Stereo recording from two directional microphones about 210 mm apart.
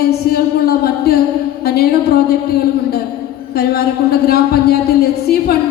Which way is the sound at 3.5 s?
50° left (ahead or behind).